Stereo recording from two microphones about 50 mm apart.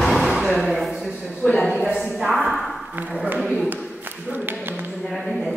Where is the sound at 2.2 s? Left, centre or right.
Centre.